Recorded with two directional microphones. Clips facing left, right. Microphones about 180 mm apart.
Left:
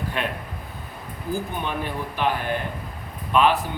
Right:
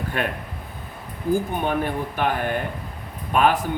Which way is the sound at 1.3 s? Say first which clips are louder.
Right 6 dB; 50° right (ahead or behind).